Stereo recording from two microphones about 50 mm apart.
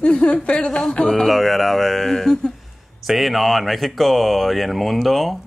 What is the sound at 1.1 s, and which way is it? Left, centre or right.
A man's voice, centre.